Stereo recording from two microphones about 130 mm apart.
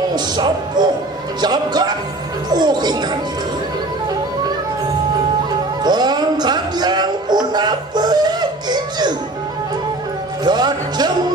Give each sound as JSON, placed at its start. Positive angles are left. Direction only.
{"t": 0.1, "sound": "speech", "side_deg": -35}
{"t": 5.9, "sound": "speech", "side_deg": -35}
{"t": 10.4, "sound": "speech", "side_deg": -35}